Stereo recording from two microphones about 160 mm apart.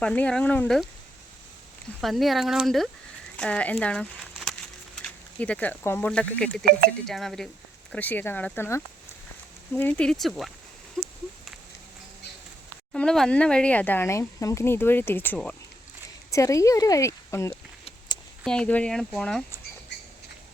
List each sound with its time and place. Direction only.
0.0 s speech: 5° left (ahead or behind)
2.0 s speech: centre (ahead or behind)
6.7 s speech: 75° right (ahead or behind)
7.1 s speech: centre (ahead or behind)
12.9 s speech: 5° left (ahead or behind)
18.4 s speech: 5° left (ahead or behind)